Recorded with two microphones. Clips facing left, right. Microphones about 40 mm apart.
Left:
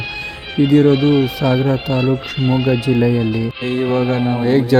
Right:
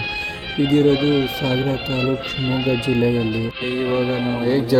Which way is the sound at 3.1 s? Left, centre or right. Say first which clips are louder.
Left 3 dB; centre.